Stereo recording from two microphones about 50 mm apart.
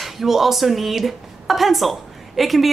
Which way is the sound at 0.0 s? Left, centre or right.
Centre.